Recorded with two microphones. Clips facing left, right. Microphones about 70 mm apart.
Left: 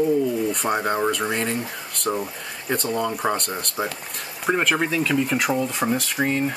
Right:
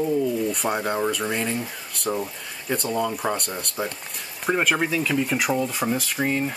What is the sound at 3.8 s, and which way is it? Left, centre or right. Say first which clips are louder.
Speech: left 2 dB; centre.